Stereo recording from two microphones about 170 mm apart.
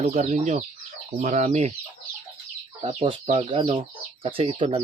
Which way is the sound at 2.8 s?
30° right (ahead or behind).